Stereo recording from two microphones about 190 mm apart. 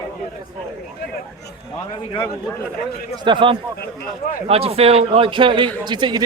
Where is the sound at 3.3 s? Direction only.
25° right (ahead or behind).